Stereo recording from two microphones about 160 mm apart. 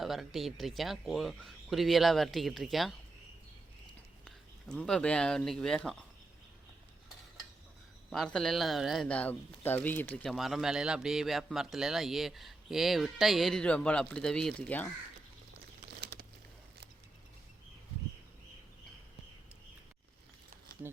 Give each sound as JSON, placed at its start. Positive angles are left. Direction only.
{"t": 0.0, "sound": "a man's voice", "side_deg": 0}
{"t": 4.7, "sound": "a man's voice", "side_deg": 5}
{"t": 8.1, "sound": "a man's voice", "side_deg": 5}
{"t": 10.2, "sound": "a man's voice", "side_deg": 0}
{"t": 16.1, "sound": "a sound", "side_deg": -75}